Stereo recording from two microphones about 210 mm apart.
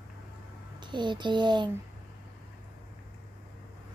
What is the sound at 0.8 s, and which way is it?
Speech, 20° right (ahead or behind).